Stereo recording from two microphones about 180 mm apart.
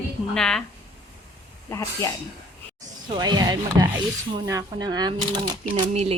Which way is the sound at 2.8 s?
25° right (ahead or behind).